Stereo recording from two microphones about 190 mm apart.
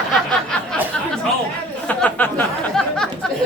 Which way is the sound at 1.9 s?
10° left (ahead or behind).